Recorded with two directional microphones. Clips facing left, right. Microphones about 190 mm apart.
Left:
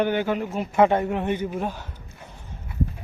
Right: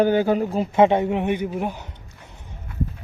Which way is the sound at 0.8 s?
20° right (ahead or behind).